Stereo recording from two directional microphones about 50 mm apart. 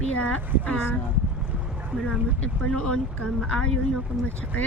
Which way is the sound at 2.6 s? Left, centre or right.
Centre.